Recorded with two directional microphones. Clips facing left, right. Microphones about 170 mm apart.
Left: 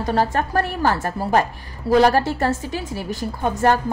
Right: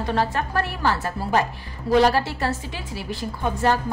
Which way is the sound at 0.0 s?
40° left (ahead or behind).